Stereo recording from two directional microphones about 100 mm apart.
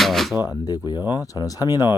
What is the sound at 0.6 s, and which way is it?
Speech, 40° left (ahead or behind).